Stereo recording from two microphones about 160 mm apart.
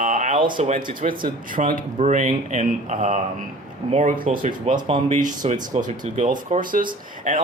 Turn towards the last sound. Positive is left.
turn(degrees=-55)  # may be behind; listen again after turning